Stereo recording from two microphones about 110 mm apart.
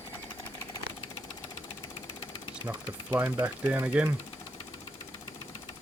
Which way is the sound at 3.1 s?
20° right (ahead or behind).